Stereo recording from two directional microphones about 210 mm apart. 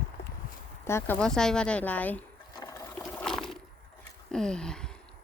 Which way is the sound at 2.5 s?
20° left (ahead or behind).